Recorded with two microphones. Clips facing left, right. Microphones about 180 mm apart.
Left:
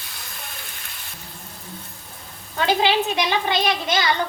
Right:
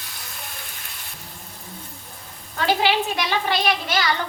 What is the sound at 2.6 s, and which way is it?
A child's voice, 20° left (ahead or behind).